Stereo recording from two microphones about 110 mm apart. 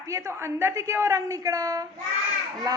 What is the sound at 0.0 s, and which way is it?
A woman's voice, 30° right (ahead or behind).